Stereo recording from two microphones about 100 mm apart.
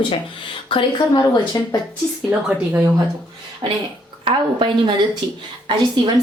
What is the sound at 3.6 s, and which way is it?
A woman's voice, 50° right (ahead or behind).